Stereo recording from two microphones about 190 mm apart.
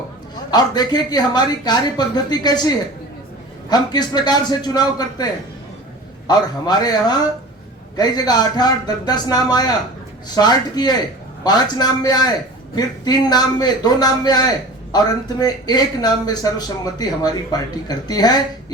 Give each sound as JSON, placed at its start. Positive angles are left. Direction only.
{"t": 0.5, "sound": "speech", "side_deg": 20}